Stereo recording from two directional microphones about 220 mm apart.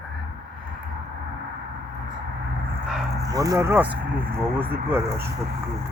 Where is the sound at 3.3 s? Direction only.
15° right (ahead or behind).